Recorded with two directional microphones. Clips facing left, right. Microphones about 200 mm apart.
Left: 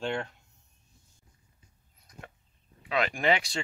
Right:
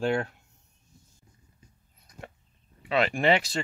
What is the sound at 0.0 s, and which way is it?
Speech, 10° right (ahead or behind).